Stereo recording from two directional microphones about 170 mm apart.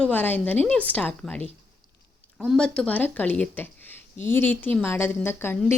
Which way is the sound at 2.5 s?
5° left (ahead or behind).